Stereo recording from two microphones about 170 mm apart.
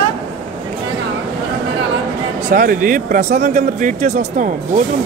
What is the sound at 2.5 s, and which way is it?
A woman's voice, 55° right (ahead or behind).